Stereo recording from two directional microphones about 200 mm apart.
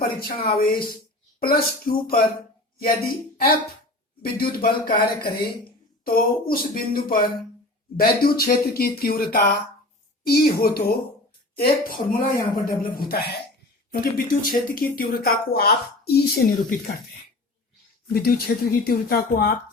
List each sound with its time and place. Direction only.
0.0 s speech: 50° left (ahead or behind)
18.1 s speech: 50° left (ahead or behind)